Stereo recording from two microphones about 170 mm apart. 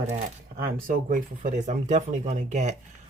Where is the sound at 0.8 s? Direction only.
50° right (ahead or behind).